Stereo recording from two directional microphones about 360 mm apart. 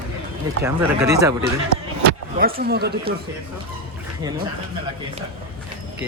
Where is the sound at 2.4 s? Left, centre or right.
Right.